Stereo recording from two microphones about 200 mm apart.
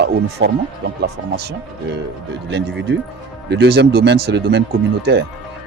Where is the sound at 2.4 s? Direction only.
60° right (ahead or behind).